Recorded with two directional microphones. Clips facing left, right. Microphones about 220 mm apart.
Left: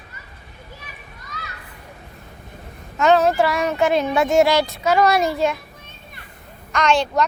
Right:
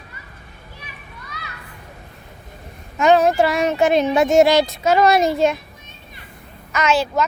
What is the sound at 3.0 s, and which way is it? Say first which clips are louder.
Speech: right 1 dB; 15° right (ahead or behind).